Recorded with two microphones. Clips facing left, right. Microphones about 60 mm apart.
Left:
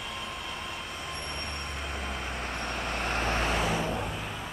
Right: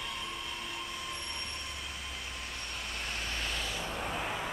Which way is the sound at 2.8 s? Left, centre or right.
Left.